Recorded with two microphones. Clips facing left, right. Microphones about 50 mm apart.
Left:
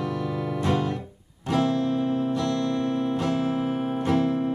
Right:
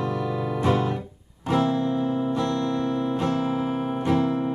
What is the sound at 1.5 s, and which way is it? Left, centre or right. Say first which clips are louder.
Music: right 1 dB; centre.